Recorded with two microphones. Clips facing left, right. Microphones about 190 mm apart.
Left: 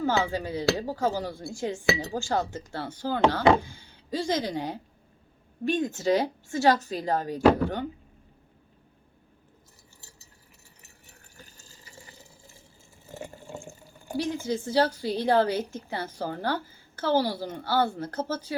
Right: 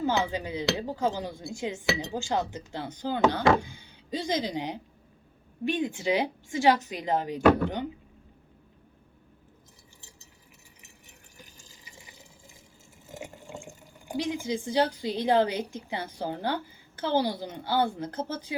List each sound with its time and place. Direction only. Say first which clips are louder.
0.0 s speech: left 1 dB; 20° right (ahead or behind)
2.7 s speech: left 1 dB; 15° right (ahead or behind)
11.3 s water: left 1 dB; 15° right (ahead or behind)
13.1 s speech: left 2 dB; 15° right (ahead or behind)